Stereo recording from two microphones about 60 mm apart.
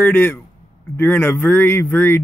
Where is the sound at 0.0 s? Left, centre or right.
Left.